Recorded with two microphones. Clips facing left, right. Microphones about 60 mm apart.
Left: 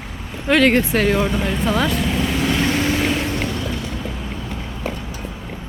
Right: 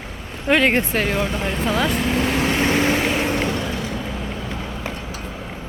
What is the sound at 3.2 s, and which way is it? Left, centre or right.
Music, right.